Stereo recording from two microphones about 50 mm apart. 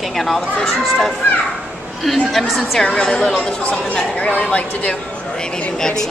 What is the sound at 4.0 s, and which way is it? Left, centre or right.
A woman's voice, centre.